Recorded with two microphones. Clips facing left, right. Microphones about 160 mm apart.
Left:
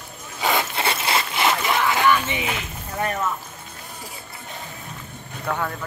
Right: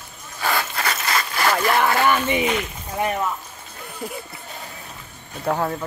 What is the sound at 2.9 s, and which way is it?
Speech, 15° right (ahead or behind).